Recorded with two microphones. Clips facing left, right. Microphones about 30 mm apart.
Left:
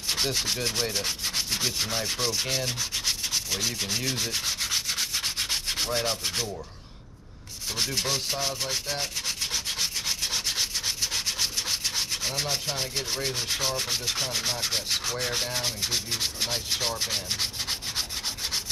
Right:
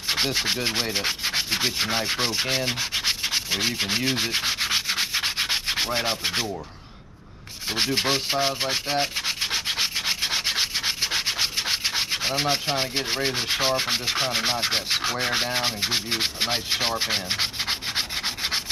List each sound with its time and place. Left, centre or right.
0.1 s rub: right
7.7 s rub: right